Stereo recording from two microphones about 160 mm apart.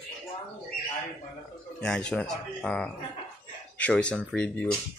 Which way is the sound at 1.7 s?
5° left (ahead or behind).